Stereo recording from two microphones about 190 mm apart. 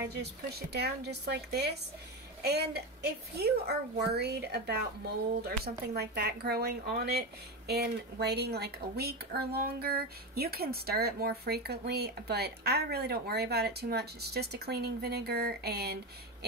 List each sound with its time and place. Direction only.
0.1 s speech: 60° right (ahead or behind)